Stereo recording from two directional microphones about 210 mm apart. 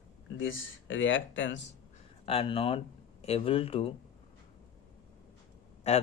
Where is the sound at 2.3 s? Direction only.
25° left (ahead or behind).